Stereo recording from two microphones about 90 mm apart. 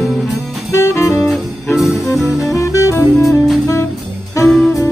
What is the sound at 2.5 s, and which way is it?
Music, 35° left (ahead or behind).